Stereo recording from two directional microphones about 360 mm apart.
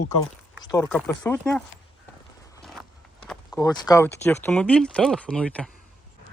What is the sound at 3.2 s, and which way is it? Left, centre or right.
Speech, centre.